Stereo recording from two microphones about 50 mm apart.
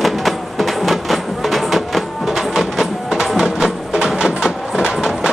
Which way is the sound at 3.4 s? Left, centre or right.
Centre.